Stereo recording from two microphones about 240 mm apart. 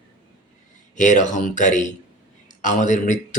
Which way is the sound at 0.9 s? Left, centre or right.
Left.